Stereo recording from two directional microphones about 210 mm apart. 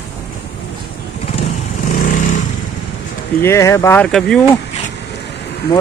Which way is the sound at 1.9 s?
40° left (ahead or behind).